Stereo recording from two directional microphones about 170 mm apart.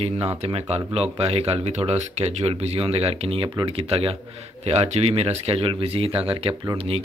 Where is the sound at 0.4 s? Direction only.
35° right (ahead or behind).